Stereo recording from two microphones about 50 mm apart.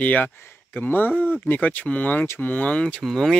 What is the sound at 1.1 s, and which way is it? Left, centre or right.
Speech, right.